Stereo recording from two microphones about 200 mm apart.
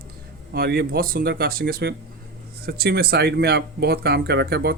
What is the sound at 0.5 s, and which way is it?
Speech, 50° right (ahead or behind).